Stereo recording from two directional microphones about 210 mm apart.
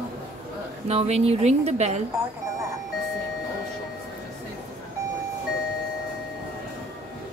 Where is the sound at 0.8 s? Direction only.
30° right (ahead or behind).